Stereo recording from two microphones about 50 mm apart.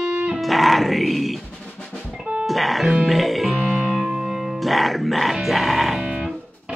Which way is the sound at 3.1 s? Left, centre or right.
Centre.